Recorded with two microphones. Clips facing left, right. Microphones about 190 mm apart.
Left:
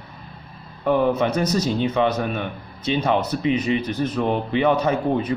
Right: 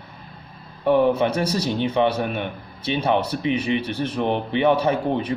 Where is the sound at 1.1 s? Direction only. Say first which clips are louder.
Left 1 dB; 10° right (ahead or behind).